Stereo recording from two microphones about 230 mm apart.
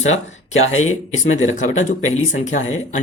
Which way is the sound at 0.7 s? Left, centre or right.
Left.